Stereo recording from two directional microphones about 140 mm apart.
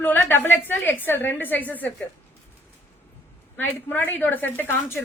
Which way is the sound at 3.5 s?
15° left (ahead or behind).